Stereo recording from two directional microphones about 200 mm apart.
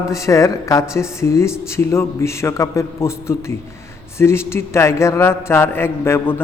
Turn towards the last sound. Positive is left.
turn(degrees=10)  # may be behind; listen again after turning